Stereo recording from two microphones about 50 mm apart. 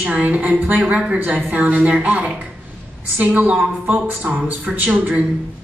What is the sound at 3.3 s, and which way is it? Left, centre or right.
A woman's voice, right.